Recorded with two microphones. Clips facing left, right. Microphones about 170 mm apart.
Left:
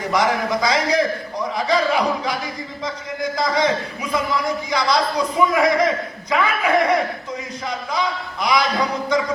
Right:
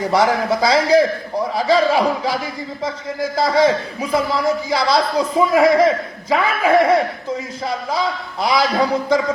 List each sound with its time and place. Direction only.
0.1 s a man's voice: 30° right (ahead or behind)
4.7 s a man's voice: 30° right (ahead or behind)